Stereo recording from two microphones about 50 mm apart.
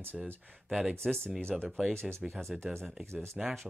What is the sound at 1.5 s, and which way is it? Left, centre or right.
Speech, centre.